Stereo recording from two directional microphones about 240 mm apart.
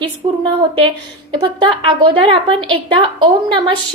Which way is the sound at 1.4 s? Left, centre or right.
Centre.